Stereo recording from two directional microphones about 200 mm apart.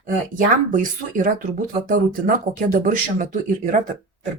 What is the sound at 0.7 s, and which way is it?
Speech, 40° right (ahead or behind).